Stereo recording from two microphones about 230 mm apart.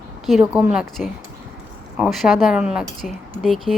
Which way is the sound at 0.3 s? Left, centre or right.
Centre.